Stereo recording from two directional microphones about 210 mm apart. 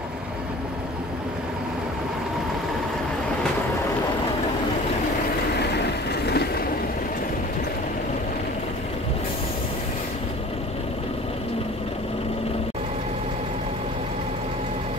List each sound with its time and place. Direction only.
6.2 s vehicle: 50° left (ahead or behind)